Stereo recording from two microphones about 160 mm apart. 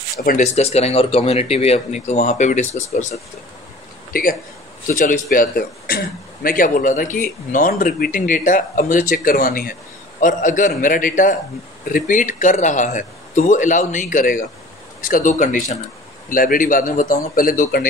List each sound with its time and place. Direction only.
0.2 s speech: 60° left (ahead or behind)
0.6 s speech: 40° left (ahead or behind)
4.1 s a man's voice: 60° left (ahead or behind)